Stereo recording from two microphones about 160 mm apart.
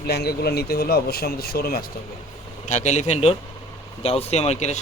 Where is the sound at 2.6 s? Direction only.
50° left (ahead or behind).